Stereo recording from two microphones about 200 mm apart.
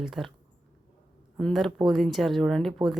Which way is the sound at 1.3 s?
Centre (ahead or behind).